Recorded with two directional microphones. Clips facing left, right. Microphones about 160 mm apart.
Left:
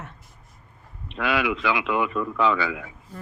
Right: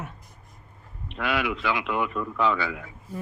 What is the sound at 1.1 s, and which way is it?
Speech, 90° left.